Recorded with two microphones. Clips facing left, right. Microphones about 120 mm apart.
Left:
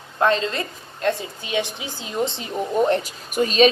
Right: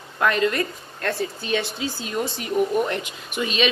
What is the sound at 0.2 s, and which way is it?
A woman's voice, 25° left (ahead or behind).